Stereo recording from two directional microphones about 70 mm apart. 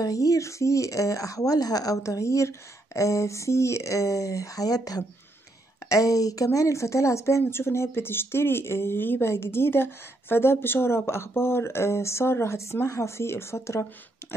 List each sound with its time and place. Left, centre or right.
0.0 s speech: left